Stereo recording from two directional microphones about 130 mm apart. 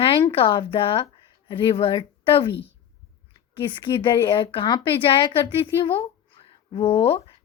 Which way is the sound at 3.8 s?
40° left (ahead or behind).